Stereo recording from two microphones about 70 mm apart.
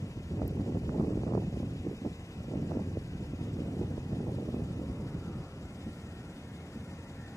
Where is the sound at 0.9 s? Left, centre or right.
Left.